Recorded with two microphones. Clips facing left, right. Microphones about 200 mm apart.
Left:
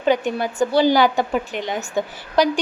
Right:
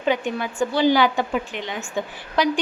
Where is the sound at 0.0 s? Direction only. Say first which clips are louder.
Left 4 dB; 40° left (ahead or behind).